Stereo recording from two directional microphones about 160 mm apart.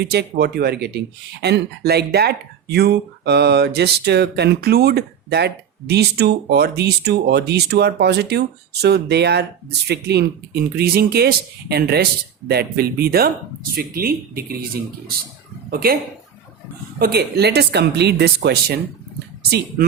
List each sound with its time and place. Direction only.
0.0 s speech: 90° right; by 14.7 s 75° right (ahead or behind)
15.7 s speech: 70° right (ahead or behind)
17.0 s speech: 85° right